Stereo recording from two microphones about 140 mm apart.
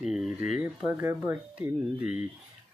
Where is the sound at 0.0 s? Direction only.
5° right (ahead or behind).